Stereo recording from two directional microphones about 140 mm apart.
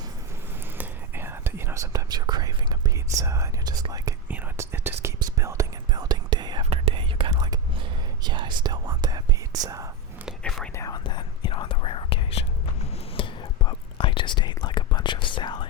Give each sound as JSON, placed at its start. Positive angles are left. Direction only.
{"t": 0.8, "sound": "whispering", "side_deg": -15}
{"t": 3.8, "sound": "speech", "side_deg": -25}
{"t": 4.3, "sound": "whispering", "side_deg": -15}
{"t": 10.4, "sound": "whispering", "side_deg": 5}
{"t": 10.8, "sound": "whispering", "side_deg": 25}